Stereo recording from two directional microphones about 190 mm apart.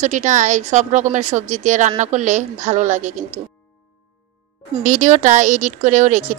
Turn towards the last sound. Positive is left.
turn(degrees=-40)  # may be behind; listen again after turning